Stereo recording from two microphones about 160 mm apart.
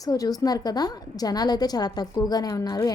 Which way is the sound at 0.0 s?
20° left (ahead or behind).